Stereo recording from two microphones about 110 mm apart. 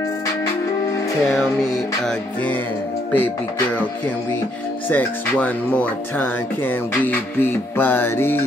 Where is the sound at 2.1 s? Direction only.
10° left (ahead or behind).